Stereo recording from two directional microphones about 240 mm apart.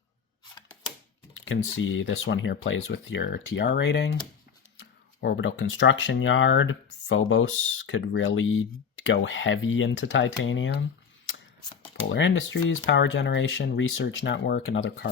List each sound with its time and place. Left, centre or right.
1.5 s speech: left
11.9 s speech: left